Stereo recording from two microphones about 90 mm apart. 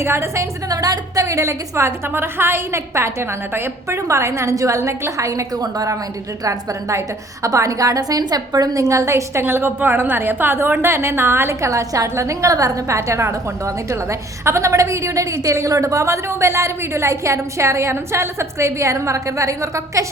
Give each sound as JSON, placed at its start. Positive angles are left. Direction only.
{"t": 0.0, "sound": "a woman's voice", "side_deg": -30}
{"t": 0.7, "sound": "a woman's voice", "side_deg": -45}